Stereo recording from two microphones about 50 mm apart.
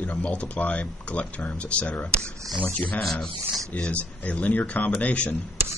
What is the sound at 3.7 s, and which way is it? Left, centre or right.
Speech, left.